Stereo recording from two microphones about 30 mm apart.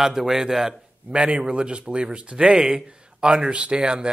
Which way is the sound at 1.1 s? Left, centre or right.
Right.